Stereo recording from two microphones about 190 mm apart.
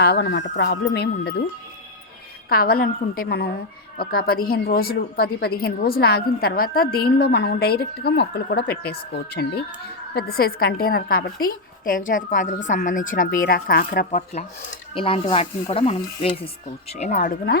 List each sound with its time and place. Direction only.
0.0 s a woman's voice: 60° left (ahead or behind)
2.5 s a woman's voice: 50° left (ahead or behind)
14.9 s speech: 30° left (ahead or behind)